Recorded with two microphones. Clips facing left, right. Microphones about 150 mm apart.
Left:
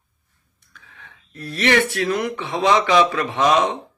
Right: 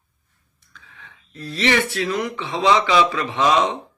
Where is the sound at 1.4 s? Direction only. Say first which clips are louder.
Left 2 dB; 55° left (ahead or behind).